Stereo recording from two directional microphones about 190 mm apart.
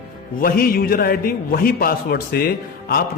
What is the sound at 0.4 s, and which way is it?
A man's voice, 50° left (ahead or behind).